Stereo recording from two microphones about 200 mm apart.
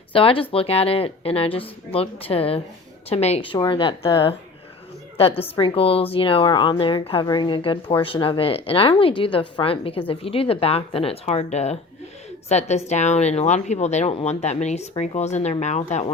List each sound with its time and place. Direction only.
0.1 s a woman's voice: 25° left (ahead or behind)
5.4 s a woman's voice: 25° left (ahead or behind)